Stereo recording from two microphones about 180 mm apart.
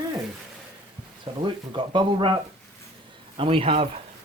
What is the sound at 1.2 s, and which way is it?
Speech, 25° right (ahead or behind).